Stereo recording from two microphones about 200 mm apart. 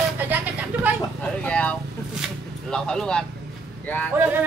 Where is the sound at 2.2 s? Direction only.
5° left (ahead or behind).